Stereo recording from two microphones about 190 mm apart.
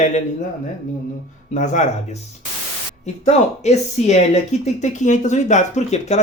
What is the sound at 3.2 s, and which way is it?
Speech, 35° left (ahead or behind).